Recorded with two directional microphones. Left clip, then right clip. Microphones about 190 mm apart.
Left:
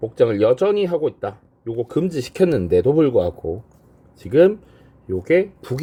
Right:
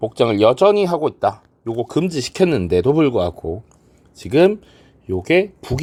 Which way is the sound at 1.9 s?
25° right (ahead or behind).